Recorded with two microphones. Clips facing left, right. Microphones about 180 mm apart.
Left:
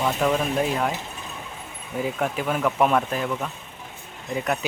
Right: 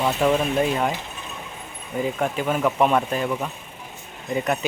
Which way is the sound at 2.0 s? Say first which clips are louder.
Right 2 dB; centre (ahead or behind).